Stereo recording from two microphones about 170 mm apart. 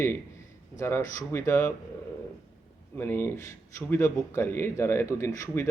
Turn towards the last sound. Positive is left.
turn(degrees=15)  # may be behind; listen again after turning